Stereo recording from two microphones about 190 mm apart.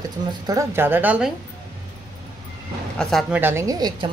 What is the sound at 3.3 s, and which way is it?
Speech, 10° right (ahead or behind).